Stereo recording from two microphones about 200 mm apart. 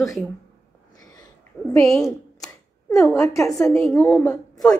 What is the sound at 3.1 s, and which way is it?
A woman's voice, 15° left (ahead or behind).